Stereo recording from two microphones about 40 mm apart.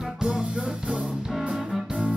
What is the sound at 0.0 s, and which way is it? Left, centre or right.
Music, centre.